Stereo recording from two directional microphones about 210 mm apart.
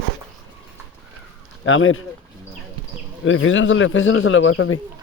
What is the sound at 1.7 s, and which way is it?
Speech, 70° left (ahead or behind).